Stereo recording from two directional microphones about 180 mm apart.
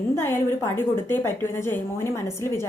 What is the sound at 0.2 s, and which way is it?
A woman's voice, 10° left (ahead or behind).